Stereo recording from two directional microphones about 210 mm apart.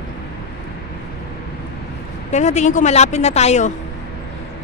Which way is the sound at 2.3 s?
35° left (ahead or behind).